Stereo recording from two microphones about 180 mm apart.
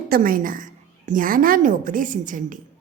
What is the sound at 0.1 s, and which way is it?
A woman's voice, 50° right (ahead or behind).